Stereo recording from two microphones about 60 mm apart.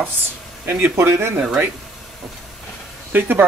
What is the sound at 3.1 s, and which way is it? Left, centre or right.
Speech, right.